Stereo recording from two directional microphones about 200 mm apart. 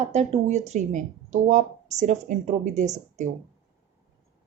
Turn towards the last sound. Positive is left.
turn(degrees=-35)  # may be behind; listen again after turning